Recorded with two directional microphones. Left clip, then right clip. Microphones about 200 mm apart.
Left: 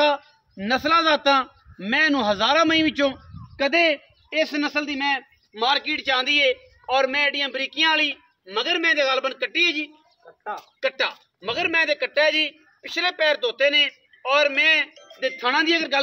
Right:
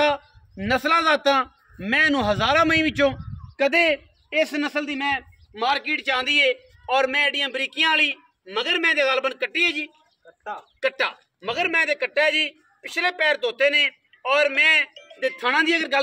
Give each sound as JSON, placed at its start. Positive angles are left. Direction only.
{"t": 0.0, "sound": "a man's voice", "side_deg": -40}